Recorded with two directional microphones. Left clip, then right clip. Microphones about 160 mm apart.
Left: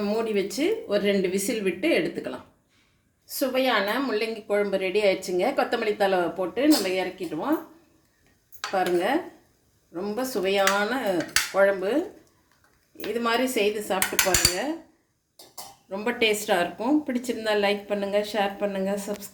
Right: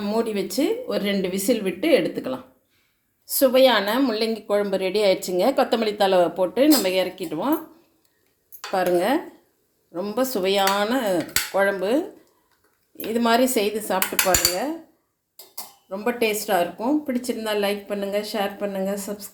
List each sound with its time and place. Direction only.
0.0 s a woman's voice: 30° right (ahead or behind)
8.7 s a woman's voice: 35° right (ahead or behind)
13.2 s speech: 30° right (ahead or behind)
15.9 s a woman's voice: 5° right (ahead or behind)